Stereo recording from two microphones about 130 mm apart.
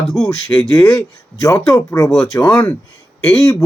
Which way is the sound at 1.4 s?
25° left (ahead or behind).